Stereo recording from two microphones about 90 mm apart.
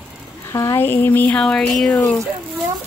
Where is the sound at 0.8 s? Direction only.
25° left (ahead or behind).